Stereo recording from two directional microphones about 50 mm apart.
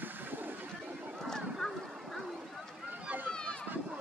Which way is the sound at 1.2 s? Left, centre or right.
Centre.